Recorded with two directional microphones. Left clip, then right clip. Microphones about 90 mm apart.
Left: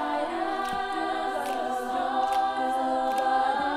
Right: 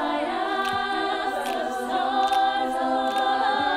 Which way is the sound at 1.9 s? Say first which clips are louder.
Right 5 dB; 45° right (ahead or behind).